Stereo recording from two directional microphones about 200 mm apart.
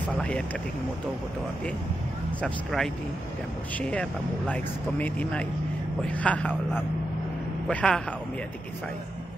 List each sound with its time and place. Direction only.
2.4 s speech: centre (ahead or behind)